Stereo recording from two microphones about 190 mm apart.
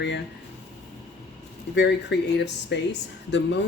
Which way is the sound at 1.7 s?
65° left (ahead or behind).